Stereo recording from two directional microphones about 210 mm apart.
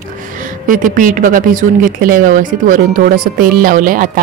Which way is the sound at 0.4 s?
40° right (ahead or behind).